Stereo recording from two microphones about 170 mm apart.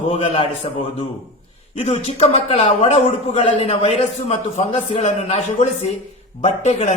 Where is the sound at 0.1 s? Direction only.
35° left (ahead or behind).